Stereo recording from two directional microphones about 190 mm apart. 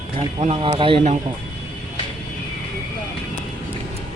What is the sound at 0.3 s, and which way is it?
Speech, 25° right (ahead or behind).